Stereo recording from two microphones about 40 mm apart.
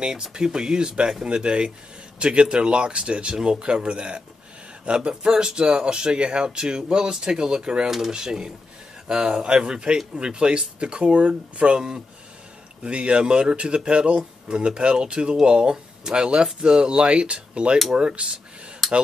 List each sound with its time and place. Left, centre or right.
0.0 s speech: centre
12.8 s speech: right
18.8 s a sound: centre